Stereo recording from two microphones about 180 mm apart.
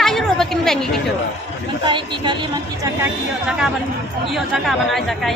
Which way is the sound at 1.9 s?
25° right (ahead or behind).